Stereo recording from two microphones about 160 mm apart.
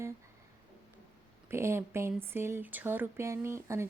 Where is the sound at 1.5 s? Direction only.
15° right (ahead or behind).